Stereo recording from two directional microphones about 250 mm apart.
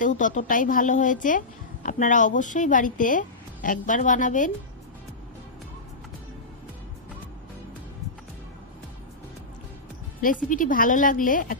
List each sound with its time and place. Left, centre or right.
0.0 s a woman's voice: left
10.2 s a woman's voice: left